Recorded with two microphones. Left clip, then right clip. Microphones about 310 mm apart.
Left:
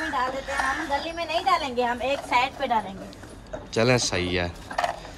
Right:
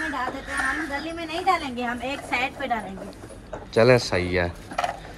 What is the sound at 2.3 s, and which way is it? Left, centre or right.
Speech, left.